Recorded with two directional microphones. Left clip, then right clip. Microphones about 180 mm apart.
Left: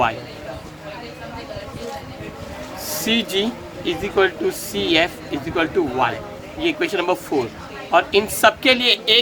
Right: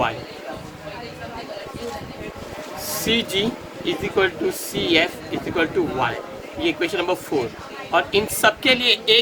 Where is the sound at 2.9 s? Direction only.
50° left (ahead or behind).